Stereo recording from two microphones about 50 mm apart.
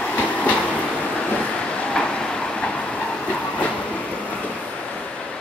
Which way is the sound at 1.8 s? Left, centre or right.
Centre.